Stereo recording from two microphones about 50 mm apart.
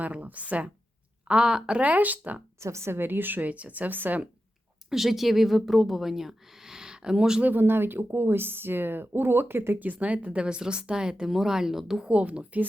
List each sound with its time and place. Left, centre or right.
0.0 s a woman's voice: right
1.3 s a woman's voice: centre
1.8 s speech: right
2.6 s speech: right
4.9 s speech: centre
7.4 s speech: right
10.0 s speech: right; by 12.0 s centre
12.0 s a woman's voice: right